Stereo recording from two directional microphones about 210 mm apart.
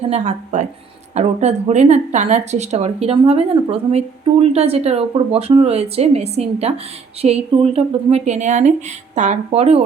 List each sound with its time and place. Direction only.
0.1 s speech: 35° right (ahead or behind)